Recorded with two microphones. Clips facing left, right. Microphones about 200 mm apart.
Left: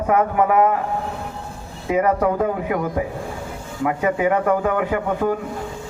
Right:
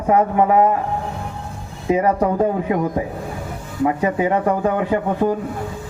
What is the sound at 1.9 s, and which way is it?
Speech, 30° right (ahead or behind).